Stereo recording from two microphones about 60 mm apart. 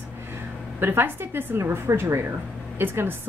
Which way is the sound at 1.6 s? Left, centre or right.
Right.